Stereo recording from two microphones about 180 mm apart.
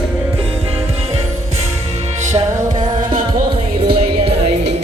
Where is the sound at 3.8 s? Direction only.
35° right (ahead or behind).